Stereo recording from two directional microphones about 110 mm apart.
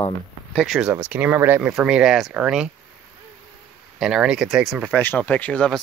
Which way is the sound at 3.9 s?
5° right (ahead or behind).